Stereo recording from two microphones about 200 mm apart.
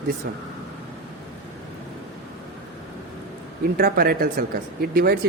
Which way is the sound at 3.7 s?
45° right (ahead or behind).